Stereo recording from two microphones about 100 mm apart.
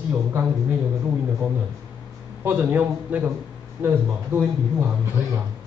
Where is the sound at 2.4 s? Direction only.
15° right (ahead or behind).